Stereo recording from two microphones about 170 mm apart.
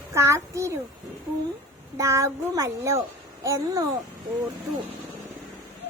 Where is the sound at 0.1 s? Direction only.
15° right (ahead or behind).